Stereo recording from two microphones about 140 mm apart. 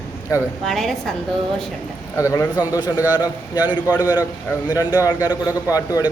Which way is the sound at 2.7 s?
25° left (ahead or behind).